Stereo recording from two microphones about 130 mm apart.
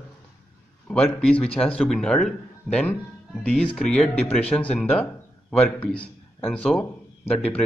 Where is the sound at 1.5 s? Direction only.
45° left (ahead or behind).